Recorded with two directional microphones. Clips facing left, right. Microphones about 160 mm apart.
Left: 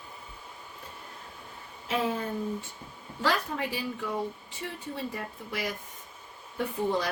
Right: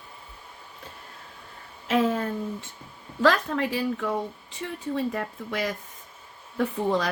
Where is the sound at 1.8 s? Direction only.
85° right.